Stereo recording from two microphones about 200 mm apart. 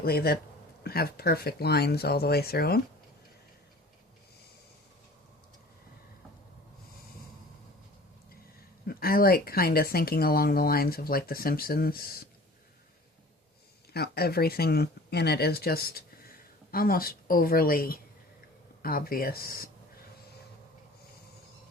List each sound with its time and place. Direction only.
0.0 s speech: 50° left (ahead or behind)
8.9 s speech: 50° left (ahead or behind)
13.9 s speech: 50° left (ahead or behind)